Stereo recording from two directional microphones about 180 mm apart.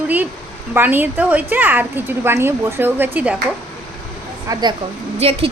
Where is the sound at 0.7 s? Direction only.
10° right (ahead or behind).